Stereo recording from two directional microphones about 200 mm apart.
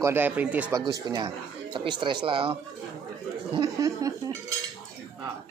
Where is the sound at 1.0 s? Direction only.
20° right (ahead or behind).